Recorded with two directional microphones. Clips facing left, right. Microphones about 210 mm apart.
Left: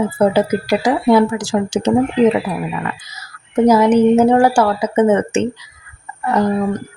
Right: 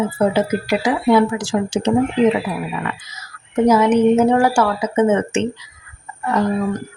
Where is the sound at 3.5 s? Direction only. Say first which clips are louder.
Left 2 dB; 35° left (ahead or behind).